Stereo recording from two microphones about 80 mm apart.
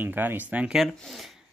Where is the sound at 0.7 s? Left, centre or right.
Centre.